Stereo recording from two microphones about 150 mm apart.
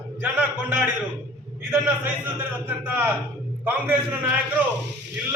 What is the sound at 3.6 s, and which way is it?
Speech, 10° right (ahead or behind).